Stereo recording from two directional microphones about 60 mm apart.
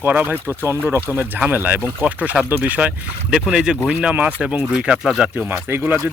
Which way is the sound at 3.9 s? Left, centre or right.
Right.